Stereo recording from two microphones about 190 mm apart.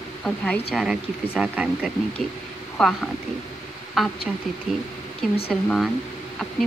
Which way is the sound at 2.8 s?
5° left (ahead or behind).